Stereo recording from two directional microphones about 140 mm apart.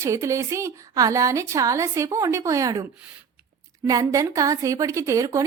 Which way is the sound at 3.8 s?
25° right (ahead or behind).